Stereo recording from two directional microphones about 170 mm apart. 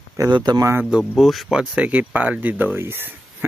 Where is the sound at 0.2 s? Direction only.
25° right (ahead or behind).